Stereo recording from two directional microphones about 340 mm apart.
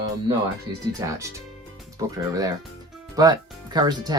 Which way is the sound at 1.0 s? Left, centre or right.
Centre.